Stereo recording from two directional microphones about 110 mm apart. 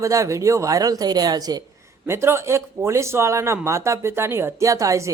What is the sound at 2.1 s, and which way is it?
Speech, 25° right (ahead or behind).